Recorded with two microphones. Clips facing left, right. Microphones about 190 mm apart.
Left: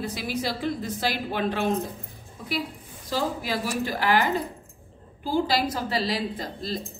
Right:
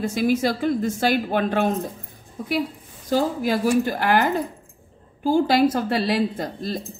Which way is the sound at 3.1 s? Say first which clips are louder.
Right 6 dB; 50° right (ahead or behind).